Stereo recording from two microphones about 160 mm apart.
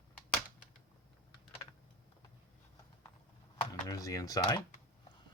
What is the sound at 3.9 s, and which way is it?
Speech, 20° left (ahead or behind).